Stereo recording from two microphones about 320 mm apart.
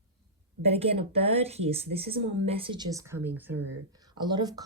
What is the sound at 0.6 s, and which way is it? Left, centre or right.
Speech, centre.